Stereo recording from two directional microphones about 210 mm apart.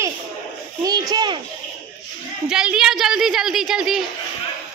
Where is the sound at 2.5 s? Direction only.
5° right (ahead or behind).